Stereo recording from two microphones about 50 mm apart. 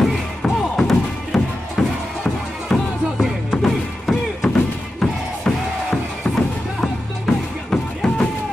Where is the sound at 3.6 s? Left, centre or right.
Centre.